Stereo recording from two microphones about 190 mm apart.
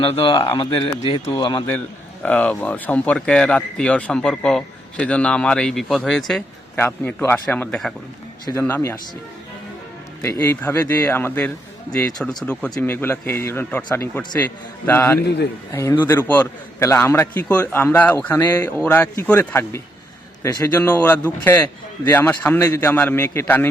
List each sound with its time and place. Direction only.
0.0 s speech: 25° left (ahead or behind)
2.2 s a man's voice: 5° left (ahead or behind)
10.2 s a man's voice: 15° left (ahead or behind)
20.7 s a man's voice: 10° left (ahead or behind)